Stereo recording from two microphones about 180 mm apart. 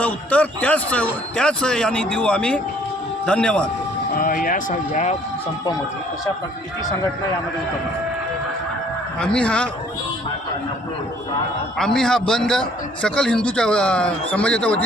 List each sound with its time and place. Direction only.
0.0 s a man's voice: 10° left (ahead or behind)
4.2 s speech: 50° left (ahead or behind)
9.2 s a man's voice: 5° left (ahead or behind)
11.9 s a man's voice: 5° left (ahead or behind)